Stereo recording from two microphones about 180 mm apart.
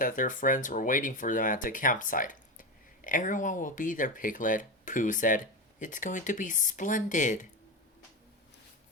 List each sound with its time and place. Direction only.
0.0 s speech: 50° left (ahead or behind)